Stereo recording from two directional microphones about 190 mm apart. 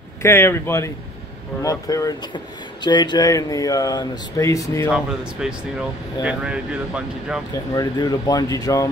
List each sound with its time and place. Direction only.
0.2 s speech: 15° left (ahead or behind)
4.9 s speech: 5° right (ahead or behind)
7.7 s speech: 20° left (ahead or behind)